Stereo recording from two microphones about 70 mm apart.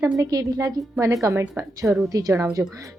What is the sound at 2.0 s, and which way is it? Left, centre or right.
Speech, right.